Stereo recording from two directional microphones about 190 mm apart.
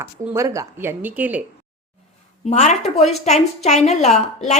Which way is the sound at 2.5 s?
35° left (ahead or behind).